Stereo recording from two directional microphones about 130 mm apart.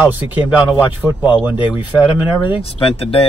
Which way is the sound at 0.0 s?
10° right (ahead or behind).